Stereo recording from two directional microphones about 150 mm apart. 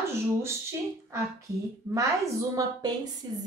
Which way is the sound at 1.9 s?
20° right (ahead or behind).